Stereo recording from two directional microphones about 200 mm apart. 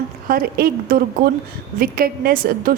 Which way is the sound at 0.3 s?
50° right (ahead or behind).